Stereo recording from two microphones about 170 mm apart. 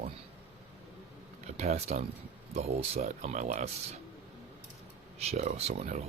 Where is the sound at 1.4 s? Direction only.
40° right (ahead or behind).